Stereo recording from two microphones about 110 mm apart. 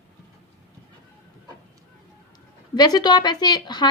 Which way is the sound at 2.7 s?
35° left (ahead or behind).